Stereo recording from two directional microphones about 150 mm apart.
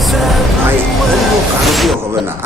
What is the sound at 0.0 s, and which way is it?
Music, centre (ahead or behind).